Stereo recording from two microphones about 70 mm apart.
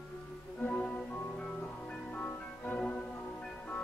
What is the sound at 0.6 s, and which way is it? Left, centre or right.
Music, centre.